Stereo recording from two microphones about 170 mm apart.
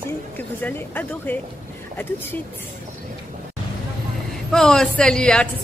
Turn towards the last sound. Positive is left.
turn(degrees=5)  # may be behind; listen again after turning